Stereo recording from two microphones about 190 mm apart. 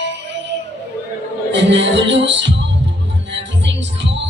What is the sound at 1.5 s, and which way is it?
Music, 70° right (ahead or behind).